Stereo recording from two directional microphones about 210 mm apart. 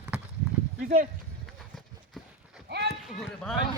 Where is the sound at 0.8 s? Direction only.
40° right (ahead or behind).